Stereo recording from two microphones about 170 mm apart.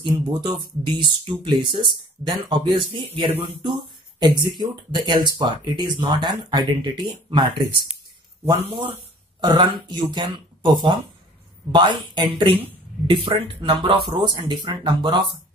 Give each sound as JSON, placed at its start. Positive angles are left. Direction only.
{"t": 0.0, "sound": "speech", "side_deg": -25}
{"t": 9.4, "sound": "speech", "side_deg": -25}